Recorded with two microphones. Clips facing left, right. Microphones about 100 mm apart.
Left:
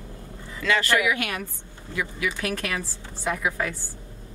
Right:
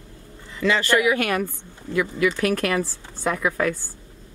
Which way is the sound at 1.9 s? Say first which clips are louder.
Right 7 dB; 60° right (ahead or behind).